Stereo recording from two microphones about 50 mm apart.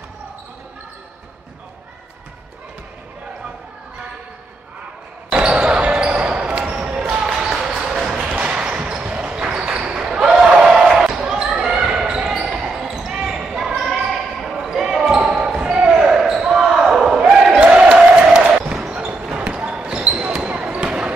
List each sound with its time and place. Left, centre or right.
5.3 s basketball bounce: centre
8.1 s basketball bounce: right
15.0 s basketball bounce: right
16.1 s basketball bounce: centre
17.6 s a sound: right
18.3 s basketball bounce: centre